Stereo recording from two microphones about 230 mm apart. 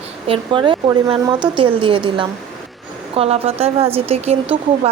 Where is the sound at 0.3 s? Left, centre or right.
Right.